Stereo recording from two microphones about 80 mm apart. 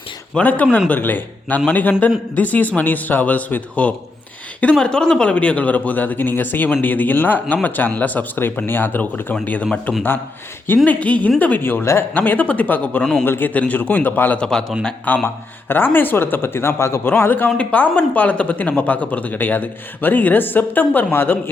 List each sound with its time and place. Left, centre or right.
0.3 s a man's voice: centre
10.8 s a man's voice: centre
13.2 s a man's voice: left
14.3 s a man's voice: centre; by 21.5 s left